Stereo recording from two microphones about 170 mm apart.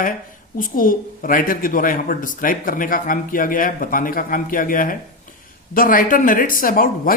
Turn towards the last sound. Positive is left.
turn(degrees=55)  # may be behind; listen again after turning